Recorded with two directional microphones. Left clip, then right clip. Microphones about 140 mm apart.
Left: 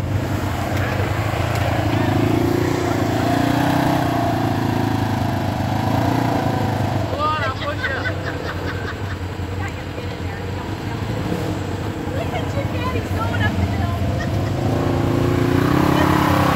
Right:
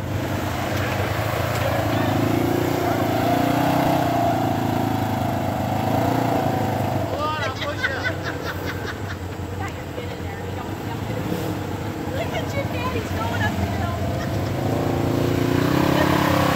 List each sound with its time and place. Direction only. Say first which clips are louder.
1.9 s vehicle: left 2 dB; centre (ahead or behind)
5.9 s vehicle: left 1 dB; 10° left (ahead or behind)
7.2 s vehicle: left 4 dB; 5° right (ahead or behind)
15.5 s vehicle: left 2 dB; 15° left (ahead or behind)